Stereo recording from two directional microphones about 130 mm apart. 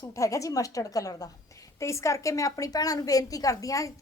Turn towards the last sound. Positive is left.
turn(degrees=25)  # may be behind; listen again after turning